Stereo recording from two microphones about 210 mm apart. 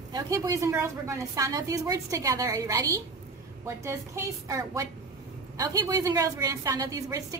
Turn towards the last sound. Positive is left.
turn(degrees=-15)  # may be behind; listen again after turning